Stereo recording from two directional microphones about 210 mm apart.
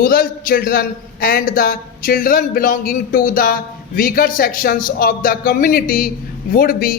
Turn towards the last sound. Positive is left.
turn(degrees=45)  # may be behind; listen again after turning